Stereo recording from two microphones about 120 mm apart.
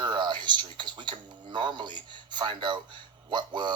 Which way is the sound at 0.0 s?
40° right (ahead or behind).